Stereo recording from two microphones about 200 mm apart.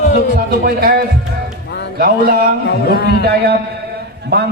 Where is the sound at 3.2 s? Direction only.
55° right (ahead or behind).